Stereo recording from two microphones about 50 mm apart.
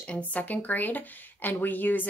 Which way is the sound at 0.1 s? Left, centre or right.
Left.